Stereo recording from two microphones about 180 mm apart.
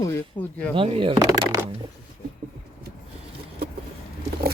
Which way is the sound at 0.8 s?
30° right (ahead or behind).